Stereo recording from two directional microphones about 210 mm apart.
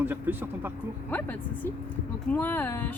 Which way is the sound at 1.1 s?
10° left (ahead or behind).